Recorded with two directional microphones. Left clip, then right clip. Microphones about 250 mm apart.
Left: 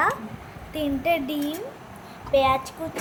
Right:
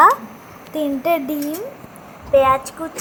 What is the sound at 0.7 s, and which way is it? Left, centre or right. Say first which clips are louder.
A woman's voice: right 5 dB; right.